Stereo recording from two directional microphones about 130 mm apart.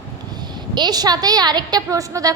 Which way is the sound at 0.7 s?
35° right (ahead or behind).